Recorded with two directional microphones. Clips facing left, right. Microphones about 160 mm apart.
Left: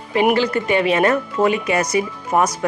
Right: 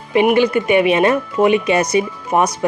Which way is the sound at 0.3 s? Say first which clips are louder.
Right 4 dB; 20° right (ahead or behind).